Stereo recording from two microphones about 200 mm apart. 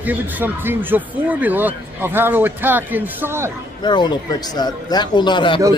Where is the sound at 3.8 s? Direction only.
20° left (ahead or behind).